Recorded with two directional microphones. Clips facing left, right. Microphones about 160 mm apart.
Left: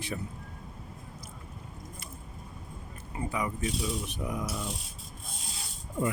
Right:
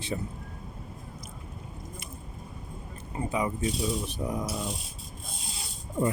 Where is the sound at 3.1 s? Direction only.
25° right (ahead or behind).